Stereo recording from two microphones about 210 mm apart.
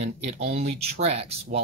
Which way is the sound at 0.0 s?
30° right (ahead or behind).